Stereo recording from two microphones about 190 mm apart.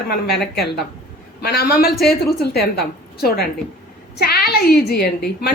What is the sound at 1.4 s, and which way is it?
A woman's voice, 55° left (ahead or behind).